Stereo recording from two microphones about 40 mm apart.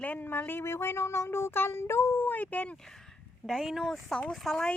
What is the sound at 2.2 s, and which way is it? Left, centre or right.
Speech, left.